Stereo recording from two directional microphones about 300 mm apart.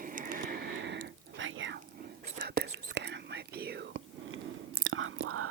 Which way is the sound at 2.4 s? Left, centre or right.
Right.